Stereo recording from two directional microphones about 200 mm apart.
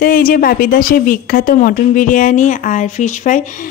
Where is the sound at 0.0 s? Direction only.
45° left (ahead or behind).